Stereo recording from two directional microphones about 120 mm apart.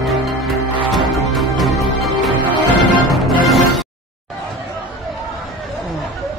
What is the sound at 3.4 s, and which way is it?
Music, centre (ahead or behind).